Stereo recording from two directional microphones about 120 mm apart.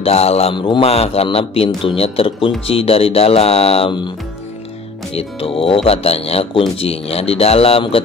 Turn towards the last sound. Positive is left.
turn(degrees=55)  # may be behind; listen again after turning